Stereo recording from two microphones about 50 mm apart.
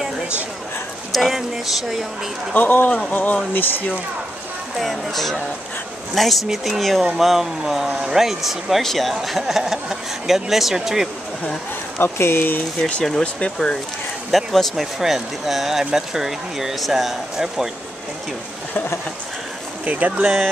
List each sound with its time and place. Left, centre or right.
1.1 s speech: centre
2.5 s a man's voice: left
4.7 s speech: centre
12.0 s speech: left
13.2 s speech: left
14.3 s speech: centre
19.8 s speech: right